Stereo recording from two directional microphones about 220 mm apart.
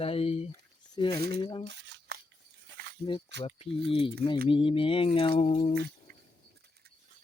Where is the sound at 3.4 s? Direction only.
25° left (ahead or behind).